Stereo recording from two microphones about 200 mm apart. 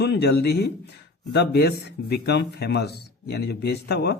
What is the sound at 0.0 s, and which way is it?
Speech, 55° left (ahead or behind).